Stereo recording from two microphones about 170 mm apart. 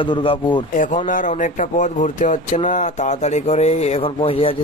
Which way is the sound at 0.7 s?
50° left (ahead or behind).